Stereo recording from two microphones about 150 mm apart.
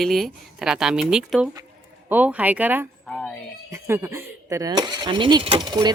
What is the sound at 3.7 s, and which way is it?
Speech, 20° right (ahead or behind).